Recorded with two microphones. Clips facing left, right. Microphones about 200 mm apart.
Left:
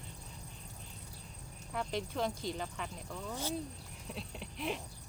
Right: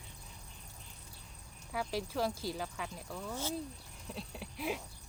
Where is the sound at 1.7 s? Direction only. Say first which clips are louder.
Right 1 dB; 5° right (ahead or behind).